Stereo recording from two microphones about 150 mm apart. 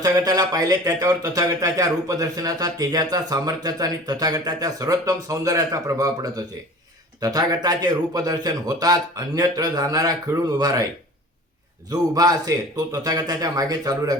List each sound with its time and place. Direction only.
0.0 s speech: 25° right (ahead or behind)
11.9 s speech: 25° right (ahead or behind)